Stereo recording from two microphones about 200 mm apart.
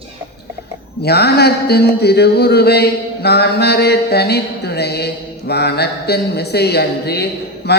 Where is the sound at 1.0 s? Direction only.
55° left (ahead or behind).